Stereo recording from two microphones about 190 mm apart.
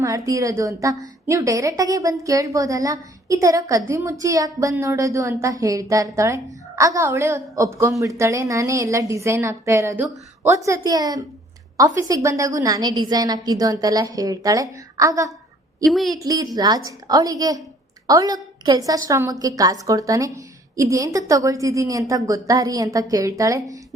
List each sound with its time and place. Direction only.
0.0 s a woman's voice: 15° right (ahead or behind)
15.8 s a woman's voice: centre (ahead or behind)
16.1 s a woman's voice: 20° right (ahead or behind)